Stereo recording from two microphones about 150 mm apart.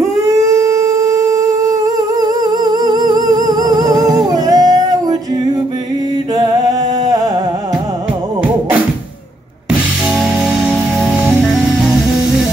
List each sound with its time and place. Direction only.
2.4 s humming: 25° right (ahead or behind)
6.3 s music: 25° right (ahead or behind)